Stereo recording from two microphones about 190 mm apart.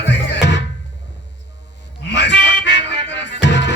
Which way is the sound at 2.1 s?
65° left (ahead or behind).